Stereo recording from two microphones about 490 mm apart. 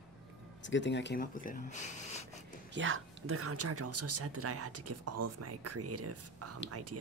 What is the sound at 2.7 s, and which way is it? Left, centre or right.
Speech, right.